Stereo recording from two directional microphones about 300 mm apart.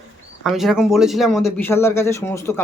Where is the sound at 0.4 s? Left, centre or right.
Centre.